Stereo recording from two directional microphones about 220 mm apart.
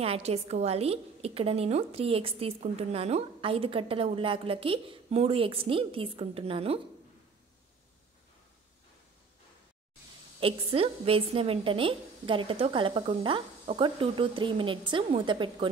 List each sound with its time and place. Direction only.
0.0 s a woman's voice: 25° right (ahead or behind)
10.4 s a woman's voice: 25° right (ahead or behind)